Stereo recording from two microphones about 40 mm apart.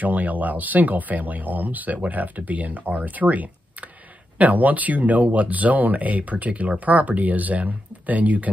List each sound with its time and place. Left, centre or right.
0.0 s speech: right